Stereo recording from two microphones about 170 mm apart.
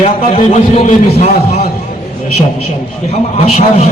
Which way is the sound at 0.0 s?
40° left (ahead or behind).